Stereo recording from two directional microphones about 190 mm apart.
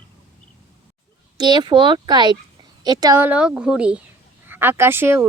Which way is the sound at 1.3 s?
20° right (ahead or behind).